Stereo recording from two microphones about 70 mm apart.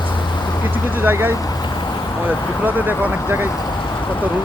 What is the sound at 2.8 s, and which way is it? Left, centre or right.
Speech, right.